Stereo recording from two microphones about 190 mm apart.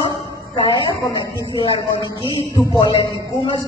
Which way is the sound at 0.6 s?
20° left (ahead or behind).